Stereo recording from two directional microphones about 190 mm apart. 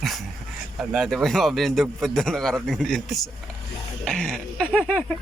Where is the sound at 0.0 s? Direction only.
Centre (ahead or behind).